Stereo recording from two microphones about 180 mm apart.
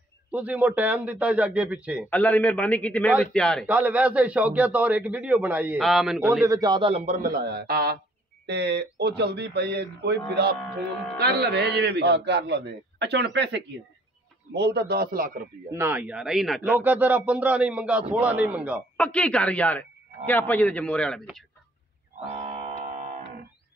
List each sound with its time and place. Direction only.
0.3 s a man's voice: 10° right (ahead or behind)
2.0 s a man's voice: 10° left (ahead or behind)
3.6 s a man's voice: 10° right (ahead or behind)
6.4 s a man's voice: 20° right (ahead or behind); by 8.0 s 55° right (ahead or behind)
8.5 s a man's voice: 70° right (ahead or behind); by 15.4 s 50° right (ahead or behind)
15.7 s a man's voice: 10° right (ahead or behind)
18.9 s a man's voice: 5° left (ahead or behind)
22.3 s music: 35° right (ahead or behind)